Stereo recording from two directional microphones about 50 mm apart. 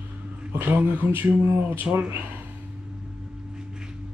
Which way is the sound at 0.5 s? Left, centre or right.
Right.